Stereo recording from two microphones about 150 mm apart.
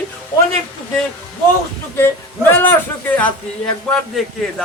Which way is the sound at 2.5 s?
10° left (ahead or behind).